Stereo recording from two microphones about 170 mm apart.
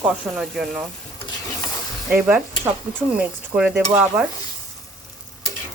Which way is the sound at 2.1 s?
10° right (ahead or behind).